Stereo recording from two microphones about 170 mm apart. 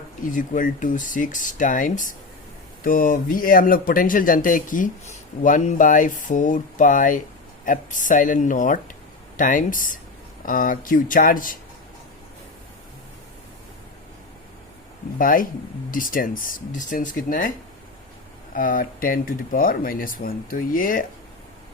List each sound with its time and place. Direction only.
0.3 s speech: 50° left (ahead or behind)
15.2 s speech: 55° left (ahead or behind)
18.5 s speech: 55° left (ahead or behind)